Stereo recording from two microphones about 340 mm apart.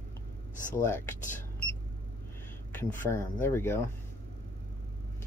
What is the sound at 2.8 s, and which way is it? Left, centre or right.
Speech, centre.